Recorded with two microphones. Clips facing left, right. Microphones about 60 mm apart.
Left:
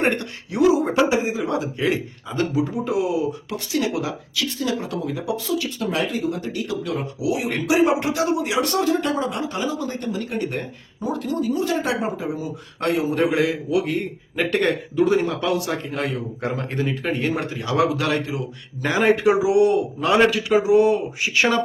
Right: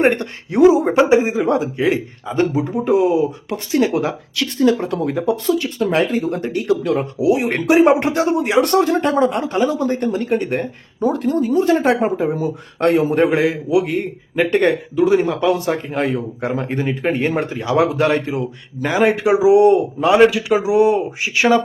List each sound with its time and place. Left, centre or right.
0.0 s speech: right
12.9 s speech: right
13.7 s a man's voice: centre
14.5 s speech: right
14.9 s a man's voice: centre
15.2 s speech: right
18.9 s a man's voice: centre
19.4 s speech: right
20.2 s a man's voice: centre
20.6 s a man's voice: right